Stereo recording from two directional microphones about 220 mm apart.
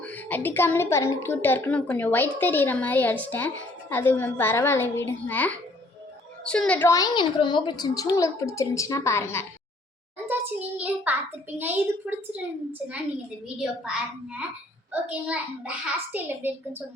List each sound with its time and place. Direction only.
0.0 s a woman's voice: 5° left (ahead or behind)
10.8 s a child's voice: 5° right (ahead or behind)
13.6 s a child's voice: 5° right (ahead or behind)